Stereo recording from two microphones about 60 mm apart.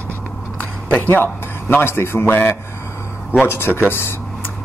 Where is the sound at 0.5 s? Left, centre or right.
Left.